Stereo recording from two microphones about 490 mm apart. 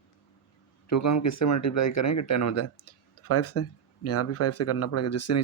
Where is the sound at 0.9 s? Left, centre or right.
Left.